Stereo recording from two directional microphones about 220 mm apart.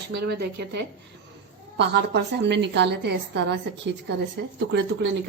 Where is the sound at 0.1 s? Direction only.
45° right (ahead or behind).